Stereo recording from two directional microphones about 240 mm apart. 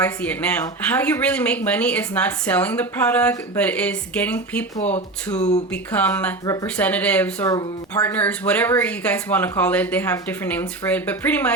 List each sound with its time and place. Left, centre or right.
0.0 s speech: centre
5.4 s speech: left
5.7 s speech: centre